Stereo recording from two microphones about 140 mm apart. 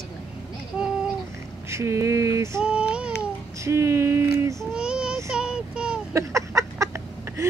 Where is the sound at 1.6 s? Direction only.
20° right (ahead or behind).